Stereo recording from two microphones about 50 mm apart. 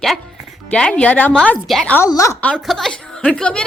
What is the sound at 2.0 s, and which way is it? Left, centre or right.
Speech, left.